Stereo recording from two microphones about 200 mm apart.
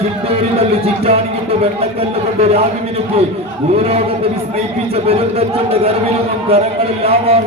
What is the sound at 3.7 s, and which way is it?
A man's voice, 30° right (ahead or behind).